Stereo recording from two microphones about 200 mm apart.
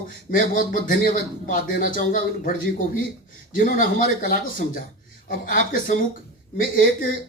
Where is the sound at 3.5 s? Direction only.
45° left (ahead or behind).